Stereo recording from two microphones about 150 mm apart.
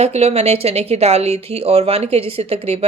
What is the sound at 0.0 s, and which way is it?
Speech, 45° right (ahead or behind).